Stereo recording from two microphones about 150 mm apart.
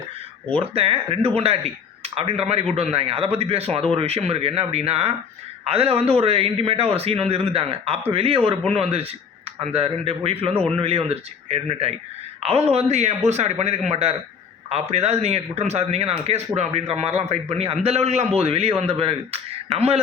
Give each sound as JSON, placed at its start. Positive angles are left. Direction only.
{"t": 0.7, "sound": "a man's voice", "side_deg": -40}
{"t": 10.5, "sound": "a man's voice", "side_deg": 10}
{"t": 10.8, "sound": "a man's voice", "side_deg": -40}